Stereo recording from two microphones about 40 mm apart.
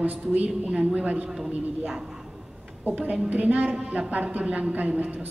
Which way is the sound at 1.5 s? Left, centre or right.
Right.